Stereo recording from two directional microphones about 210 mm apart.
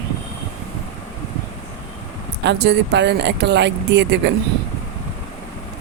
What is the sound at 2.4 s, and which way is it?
Speech, 55° right (ahead or behind).